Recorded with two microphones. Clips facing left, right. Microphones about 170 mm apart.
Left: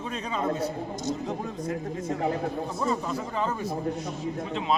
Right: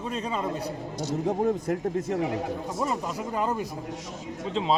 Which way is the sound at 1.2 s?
50° right (ahead or behind).